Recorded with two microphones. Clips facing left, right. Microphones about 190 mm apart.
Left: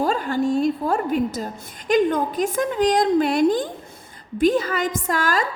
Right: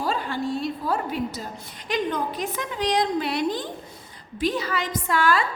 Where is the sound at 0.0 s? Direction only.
45° left (ahead or behind).